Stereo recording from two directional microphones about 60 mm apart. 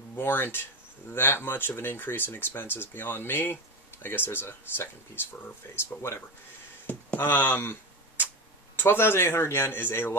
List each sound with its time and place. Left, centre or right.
0.1 s speech: left
7.2 s speech: left
8.7 s speech: left